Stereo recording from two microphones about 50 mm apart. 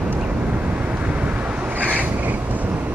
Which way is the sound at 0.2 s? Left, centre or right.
Right.